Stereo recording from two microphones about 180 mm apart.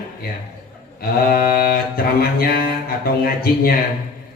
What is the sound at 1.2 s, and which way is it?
Speech, 55° left (ahead or behind).